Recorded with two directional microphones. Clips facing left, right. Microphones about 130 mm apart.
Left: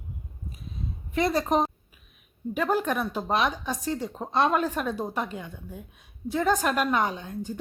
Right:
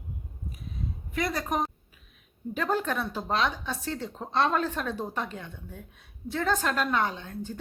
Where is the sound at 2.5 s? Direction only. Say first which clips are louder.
Left 3 dB; 10° left (ahead or behind).